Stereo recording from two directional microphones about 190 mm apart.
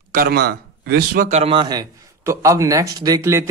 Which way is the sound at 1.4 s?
25° right (ahead or behind).